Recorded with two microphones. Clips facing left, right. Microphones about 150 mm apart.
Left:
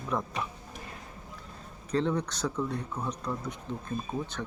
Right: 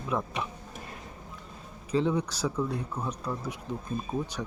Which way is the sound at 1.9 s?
5° right (ahead or behind).